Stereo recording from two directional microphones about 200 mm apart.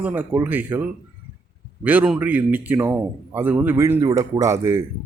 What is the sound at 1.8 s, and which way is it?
Speech, 5° right (ahead or behind).